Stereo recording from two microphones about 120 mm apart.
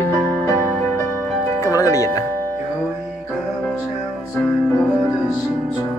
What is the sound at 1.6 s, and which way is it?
Music, 30° left (ahead or behind).